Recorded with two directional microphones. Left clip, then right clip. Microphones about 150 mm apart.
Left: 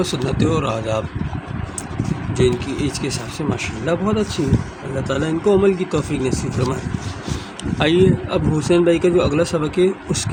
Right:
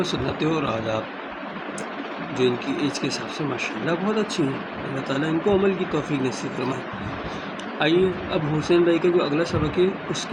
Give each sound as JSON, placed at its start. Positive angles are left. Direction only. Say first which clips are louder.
{"t": 0.0, "sound": "speech", "louder": "left 4 dB", "side_deg": 55}
{"t": 2.4, "sound": "speech", "louder": "left 4 dB", "side_deg": 55}
{"t": 7.8, "sound": "speech", "louder": "left 5 dB", "side_deg": 55}